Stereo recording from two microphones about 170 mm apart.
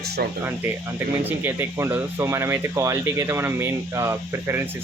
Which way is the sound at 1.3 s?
15° right (ahead or behind).